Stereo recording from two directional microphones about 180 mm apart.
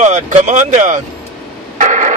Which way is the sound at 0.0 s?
40° right (ahead or behind).